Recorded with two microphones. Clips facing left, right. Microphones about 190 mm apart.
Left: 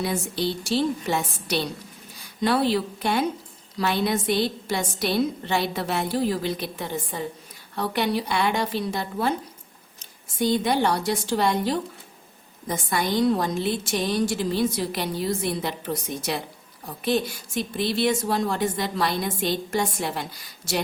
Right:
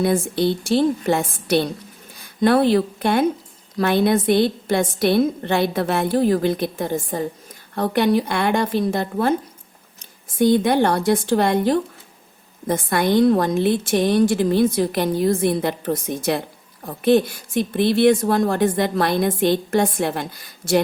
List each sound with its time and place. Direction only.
0.0 s a woman's voice: 55° right (ahead or behind)
10.3 s a woman's voice: 55° right (ahead or behind)